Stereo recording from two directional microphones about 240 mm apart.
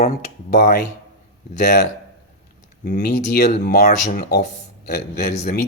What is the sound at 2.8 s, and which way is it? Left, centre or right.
Speech, left.